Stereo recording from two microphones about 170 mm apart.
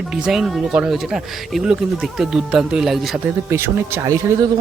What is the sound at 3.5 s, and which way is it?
Speech, 15° right (ahead or behind).